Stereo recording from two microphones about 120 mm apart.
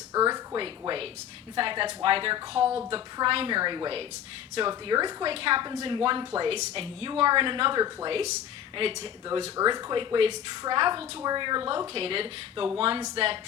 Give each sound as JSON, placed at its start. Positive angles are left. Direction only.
{"t": 0.1, "sound": "a sound", "side_deg": -30}
{"t": 1.5, "sound": "a woman's voice", "side_deg": -45}
{"t": 5.3, "sound": "a woman's voice", "side_deg": -50}